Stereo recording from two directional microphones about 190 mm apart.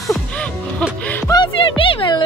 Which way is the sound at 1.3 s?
25° left (ahead or behind).